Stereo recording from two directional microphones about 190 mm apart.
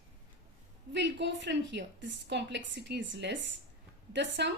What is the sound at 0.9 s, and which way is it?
A woman's voice, 70° right (ahead or behind).